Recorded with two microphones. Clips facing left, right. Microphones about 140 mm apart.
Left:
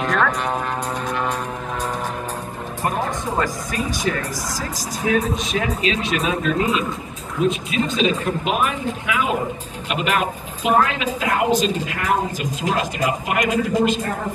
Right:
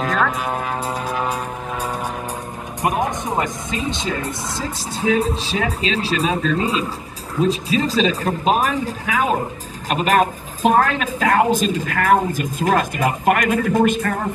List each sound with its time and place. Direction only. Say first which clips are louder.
0.0 s speech: even; 5° right (ahead or behind)
1.0 s vehicle: even; 5° right (ahead or behind)
2.8 s a woman's voice: right 3 dB; 15° right (ahead or behind); by 14.1 s 55° right (ahead or behind)